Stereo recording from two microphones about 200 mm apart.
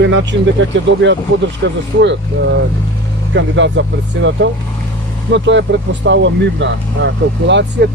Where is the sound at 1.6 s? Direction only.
60° right (ahead or behind).